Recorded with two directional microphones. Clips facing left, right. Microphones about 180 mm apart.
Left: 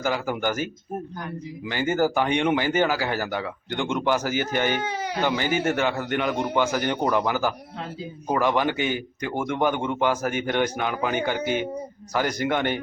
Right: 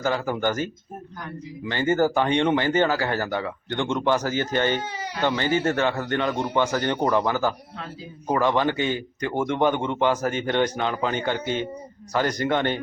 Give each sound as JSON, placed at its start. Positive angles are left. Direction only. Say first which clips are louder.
{"t": 0.0, "sound": "speech", "louder": "right 1 dB", "side_deg": 10}
{"t": 4.8, "sound": "baby cry", "louder": "left 4 dB", "side_deg": 55}
{"t": 5.2, "sound": "speech", "louder": "right 2 dB", "side_deg": 10}